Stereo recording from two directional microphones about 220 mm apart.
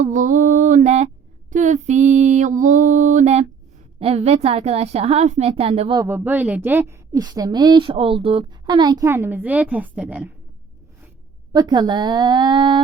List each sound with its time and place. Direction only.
0.0 s a sound: 35° right (ahead or behind)
4.0 s a woman's voice: 30° right (ahead or behind)
6.0 s a woman's voice: 10° right (ahead or behind)
11.5 s a woman's voice: 20° right (ahead or behind)